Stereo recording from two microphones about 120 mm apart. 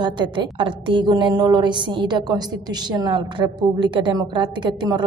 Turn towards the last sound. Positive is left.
turn(degrees=-40)  # may be behind; listen again after turning